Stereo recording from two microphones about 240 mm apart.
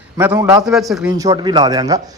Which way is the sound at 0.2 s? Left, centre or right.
Centre.